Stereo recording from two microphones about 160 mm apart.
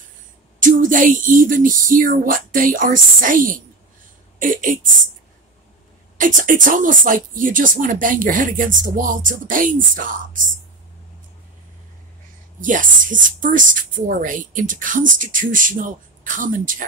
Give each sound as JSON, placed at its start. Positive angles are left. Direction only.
{"t": 0.6, "sound": "speech", "side_deg": -55}
{"t": 6.1, "sound": "speech", "side_deg": -55}
{"t": 12.5, "sound": "speech", "side_deg": -55}